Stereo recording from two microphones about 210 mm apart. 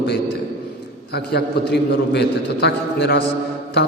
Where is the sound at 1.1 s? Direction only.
50° left (ahead or behind).